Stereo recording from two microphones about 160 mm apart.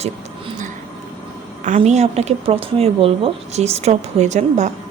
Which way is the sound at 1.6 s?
50° right (ahead or behind).